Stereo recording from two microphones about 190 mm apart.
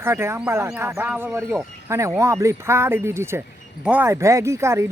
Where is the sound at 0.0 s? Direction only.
15° right (ahead or behind).